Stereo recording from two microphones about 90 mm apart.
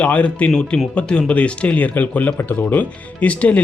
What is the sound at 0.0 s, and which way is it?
Speech, 15° left (ahead or behind).